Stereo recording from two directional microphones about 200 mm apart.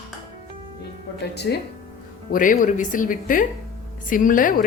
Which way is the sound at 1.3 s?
55° left (ahead or behind).